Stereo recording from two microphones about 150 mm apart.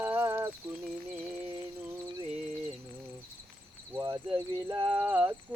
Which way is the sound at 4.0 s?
25° right (ahead or behind).